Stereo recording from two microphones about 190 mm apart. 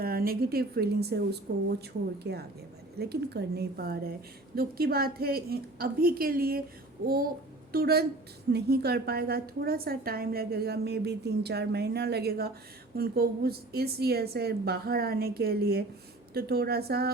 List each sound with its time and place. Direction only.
0.0 s a woman's voice: 50° right (ahead or behind)